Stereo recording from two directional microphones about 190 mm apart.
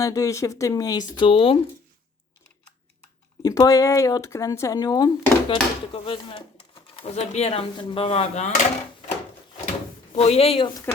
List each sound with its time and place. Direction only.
0.0 s speech: 15° left (ahead or behind)
3.4 s speech: 20° left (ahead or behind); by 8.6 s 40° left (ahead or behind)
10.2 s speech: 30° left (ahead or behind)
10.9 s speech: 10° left (ahead or behind)